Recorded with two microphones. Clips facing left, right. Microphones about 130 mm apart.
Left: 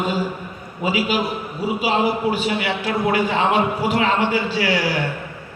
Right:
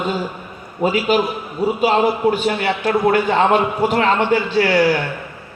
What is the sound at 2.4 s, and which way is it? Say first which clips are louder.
A man's voice: right 4 dB; 45° right (ahead or behind).